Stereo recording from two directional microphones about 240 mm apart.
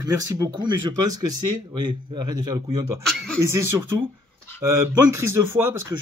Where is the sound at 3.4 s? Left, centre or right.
Centre.